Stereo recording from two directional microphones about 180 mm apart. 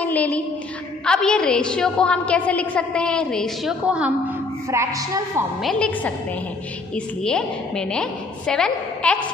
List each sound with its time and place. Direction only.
0.0 s a sound: 10° left (ahead or behind)
1.0 s a woman's voice: 5° left (ahead or behind)
4.6 s music: 15° right (ahead or behind)
5.6 s a woman's voice: 5° left (ahead or behind)
7.2 s a woman's voice: 5° left (ahead or behind)